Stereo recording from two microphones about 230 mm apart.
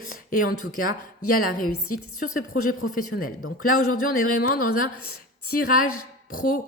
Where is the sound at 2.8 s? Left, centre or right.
Left.